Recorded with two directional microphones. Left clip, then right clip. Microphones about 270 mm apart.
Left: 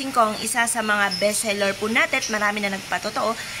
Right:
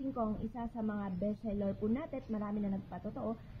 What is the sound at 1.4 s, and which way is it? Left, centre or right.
Speech, left.